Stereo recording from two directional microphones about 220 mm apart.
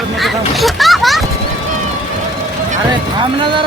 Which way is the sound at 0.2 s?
Centre (ahead or behind).